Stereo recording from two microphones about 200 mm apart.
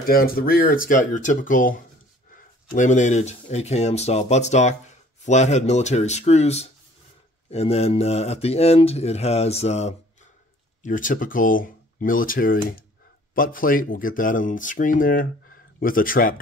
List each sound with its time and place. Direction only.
0.0 s speech: 50° left (ahead or behind)